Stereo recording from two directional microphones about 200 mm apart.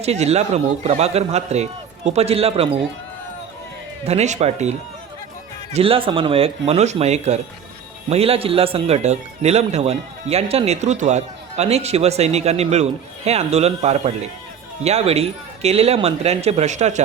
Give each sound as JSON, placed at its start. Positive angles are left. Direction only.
{"t": 0.0, "sound": "a man's voice", "side_deg": -30}
{"t": 4.0, "sound": "a man's voice", "side_deg": -35}